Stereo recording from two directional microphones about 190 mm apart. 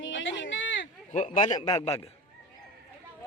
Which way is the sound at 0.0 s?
80° left.